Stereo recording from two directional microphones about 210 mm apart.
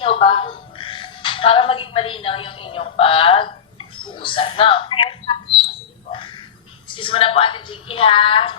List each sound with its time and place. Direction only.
0.0 s a woman's voice: 25° left (ahead or behind)